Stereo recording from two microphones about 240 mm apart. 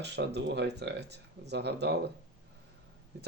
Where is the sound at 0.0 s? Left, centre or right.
Right.